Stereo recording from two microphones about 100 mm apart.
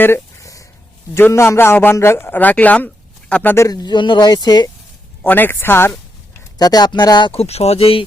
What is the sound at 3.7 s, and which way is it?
Speech, 40° left (ahead or behind).